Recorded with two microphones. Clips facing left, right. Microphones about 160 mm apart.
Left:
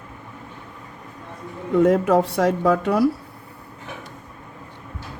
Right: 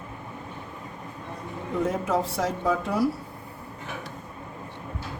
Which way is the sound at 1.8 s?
70° left (ahead or behind).